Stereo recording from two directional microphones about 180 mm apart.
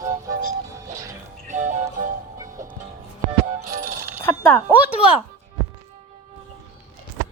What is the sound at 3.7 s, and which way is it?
Music, 15° right (ahead or behind).